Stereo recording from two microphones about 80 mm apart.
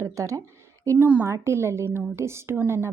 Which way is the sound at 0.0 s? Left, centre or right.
Right.